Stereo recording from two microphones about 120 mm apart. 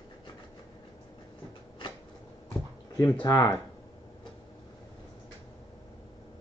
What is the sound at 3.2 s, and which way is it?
Speech, 35° left (ahead or behind).